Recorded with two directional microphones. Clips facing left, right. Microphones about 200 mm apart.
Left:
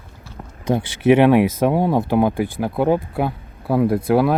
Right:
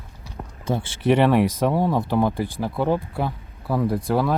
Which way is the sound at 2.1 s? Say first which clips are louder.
Left 4 dB; 55° left (ahead or behind).